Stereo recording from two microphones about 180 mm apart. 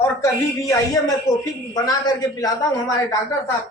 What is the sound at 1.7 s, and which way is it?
Speech, 20° left (ahead or behind).